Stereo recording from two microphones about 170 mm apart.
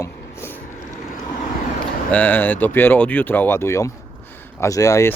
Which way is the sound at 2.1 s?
10° left (ahead or behind).